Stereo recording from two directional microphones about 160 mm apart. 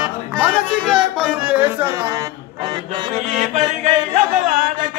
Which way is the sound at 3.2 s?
50° right (ahead or behind).